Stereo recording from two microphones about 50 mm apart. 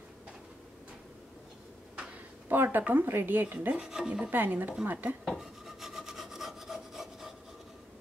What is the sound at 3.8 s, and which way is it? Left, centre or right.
Rub, centre.